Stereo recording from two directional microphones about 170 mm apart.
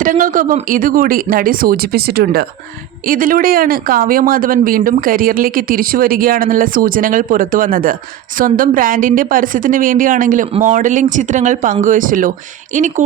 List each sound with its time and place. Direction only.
0.0 s a woman's voice: 50° right (ahead or behind)